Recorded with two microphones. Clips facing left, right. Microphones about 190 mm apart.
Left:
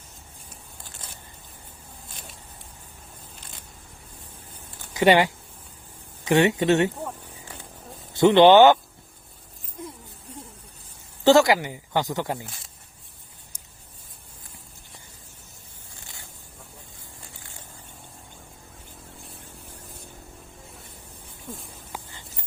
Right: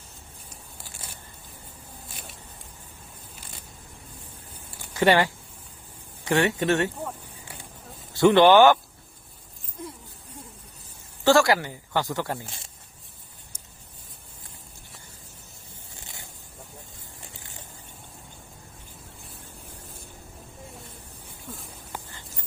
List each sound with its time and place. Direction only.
4.9 s speech: 15° left (ahead or behind)
8.1 s speech: 20° left (ahead or behind)
11.2 s speech: 20° left (ahead or behind)